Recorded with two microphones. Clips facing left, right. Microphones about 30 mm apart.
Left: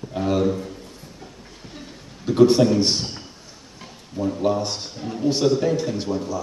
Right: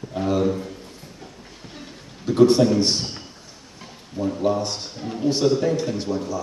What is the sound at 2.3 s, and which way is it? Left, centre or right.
Speech, centre.